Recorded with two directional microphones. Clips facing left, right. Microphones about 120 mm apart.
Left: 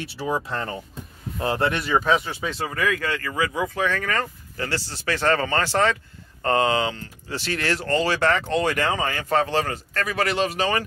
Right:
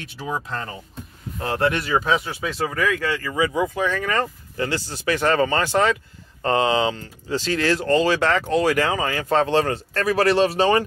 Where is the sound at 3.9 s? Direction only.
20° right (ahead or behind).